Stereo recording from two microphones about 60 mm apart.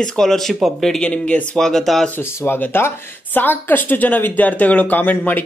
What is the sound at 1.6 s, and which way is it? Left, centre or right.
Speech, centre.